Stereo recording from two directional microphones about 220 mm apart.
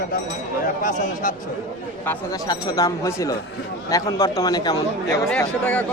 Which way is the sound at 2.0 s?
15° left (ahead or behind).